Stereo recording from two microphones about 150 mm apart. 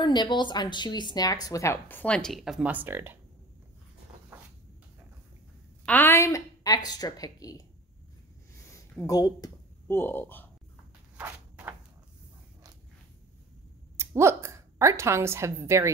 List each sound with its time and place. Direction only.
0.0 s speech: 30° left (ahead or behind); by 3.2 s 15° right (ahead or behind)
5.9 s speech: 15° left (ahead or behind)
9.0 s speech: 25° left (ahead or behind)
11.1 s walk: 10° right (ahead or behind)
13.9 s a woman's voice: 15° right (ahead or behind)